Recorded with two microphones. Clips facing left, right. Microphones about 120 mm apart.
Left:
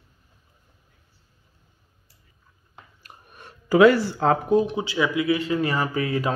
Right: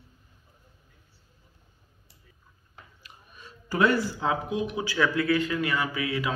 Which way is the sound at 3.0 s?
55° left (ahead or behind).